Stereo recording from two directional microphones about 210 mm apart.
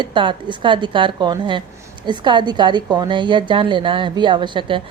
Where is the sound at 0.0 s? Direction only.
25° right (ahead or behind).